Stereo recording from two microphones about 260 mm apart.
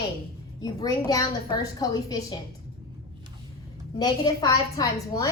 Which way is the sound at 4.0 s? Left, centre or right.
Centre.